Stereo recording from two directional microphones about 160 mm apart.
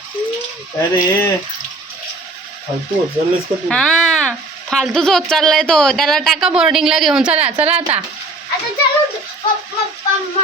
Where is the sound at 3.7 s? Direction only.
5° left (ahead or behind).